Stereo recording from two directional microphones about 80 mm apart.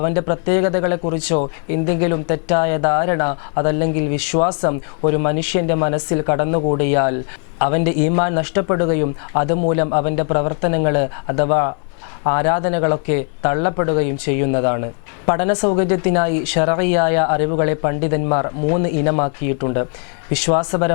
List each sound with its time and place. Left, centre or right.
0.0 s speech: centre